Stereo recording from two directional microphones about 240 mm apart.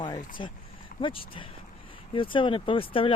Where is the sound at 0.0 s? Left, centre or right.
Centre.